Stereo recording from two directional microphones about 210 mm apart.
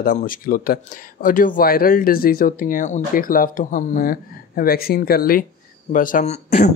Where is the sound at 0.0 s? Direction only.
40° left (ahead or behind).